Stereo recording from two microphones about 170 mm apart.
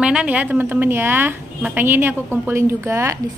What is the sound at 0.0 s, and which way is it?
A woman's voice, 5° right (ahead or behind).